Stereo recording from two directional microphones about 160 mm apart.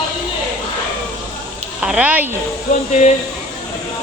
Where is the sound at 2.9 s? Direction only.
50° left (ahead or behind).